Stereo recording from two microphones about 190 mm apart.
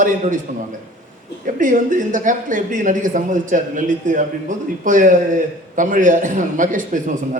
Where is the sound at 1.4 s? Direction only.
45° right (ahead or behind).